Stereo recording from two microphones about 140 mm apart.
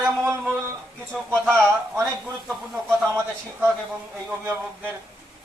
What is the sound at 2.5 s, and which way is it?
Speech, 5° right (ahead or behind).